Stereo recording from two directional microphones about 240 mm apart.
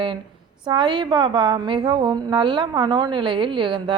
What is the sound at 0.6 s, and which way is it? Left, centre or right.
A woman's voice, centre.